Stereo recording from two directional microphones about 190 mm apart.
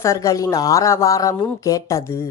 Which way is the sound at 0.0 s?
15° left (ahead or behind).